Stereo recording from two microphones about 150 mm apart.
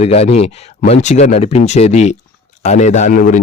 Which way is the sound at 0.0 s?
45° left (ahead or behind).